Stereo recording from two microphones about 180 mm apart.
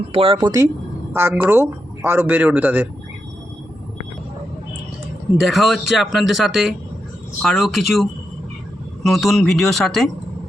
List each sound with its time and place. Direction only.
0.1 s speech: 30° right (ahead or behind); by 2.8 s 10° right (ahead or behind)
5.5 s speech: centre (ahead or behind)
9.0 s speech: centre (ahead or behind)